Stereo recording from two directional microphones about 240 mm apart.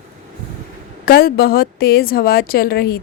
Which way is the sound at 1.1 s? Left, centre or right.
Left.